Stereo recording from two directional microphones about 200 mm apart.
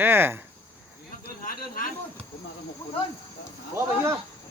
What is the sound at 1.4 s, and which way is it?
Snake, 45° left (ahead or behind).